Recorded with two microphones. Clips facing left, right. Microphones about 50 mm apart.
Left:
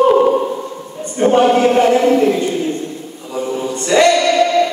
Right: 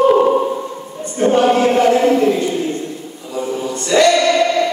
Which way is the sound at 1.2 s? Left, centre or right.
Left.